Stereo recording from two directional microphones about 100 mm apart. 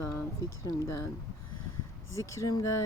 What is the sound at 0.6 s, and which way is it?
Speech, 35° left (ahead or behind).